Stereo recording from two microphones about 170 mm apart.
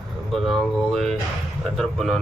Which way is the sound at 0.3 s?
Centre (ahead or behind).